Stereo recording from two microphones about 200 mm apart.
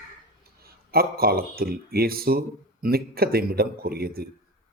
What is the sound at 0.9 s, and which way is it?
Speech, 50° right (ahead or behind).